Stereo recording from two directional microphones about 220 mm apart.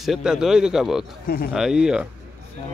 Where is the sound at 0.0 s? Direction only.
Centre (ahead or behind).